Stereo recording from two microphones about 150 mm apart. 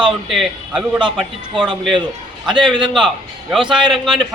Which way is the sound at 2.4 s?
30° right (ahead or behind).